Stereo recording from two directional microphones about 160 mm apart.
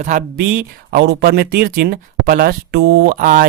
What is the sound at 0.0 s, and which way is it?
Speech, 50° right (ahead or behind).